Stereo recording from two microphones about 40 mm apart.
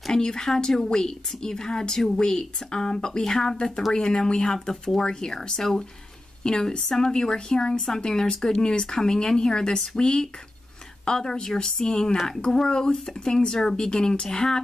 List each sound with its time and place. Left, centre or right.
0.1 s a woman's voice: centre